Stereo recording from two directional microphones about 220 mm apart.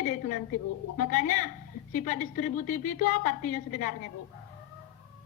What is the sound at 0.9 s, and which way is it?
A woman's voice, 35° left (ahead or behind).